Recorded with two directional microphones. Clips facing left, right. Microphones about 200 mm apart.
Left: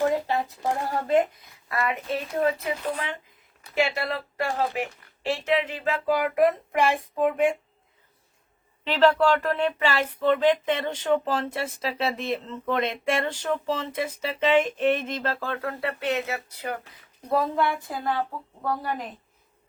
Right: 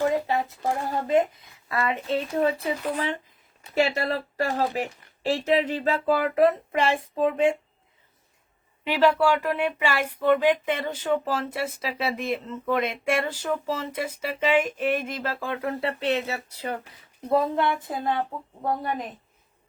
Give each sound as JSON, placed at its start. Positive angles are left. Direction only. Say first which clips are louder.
{"t": 0.5, "sound": "a woman's voice", "louder": "even", "side_deg": -20}
{"t": 8.8, "sound": "speech", "louder": "left 1 dB", "side_deg": -10}